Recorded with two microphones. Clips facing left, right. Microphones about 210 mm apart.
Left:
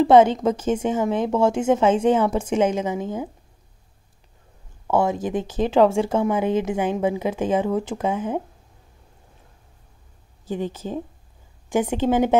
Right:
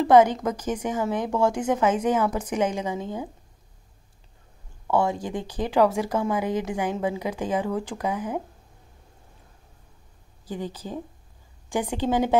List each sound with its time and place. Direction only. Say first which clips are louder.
0.0 s speech: left 3 dB; 25° left (ahead or behind)
4.9 s speech: left 3 dB; 20° left (ahead or behind)
10.5 s speech: left 5 dB; 20° left (ahead or behind)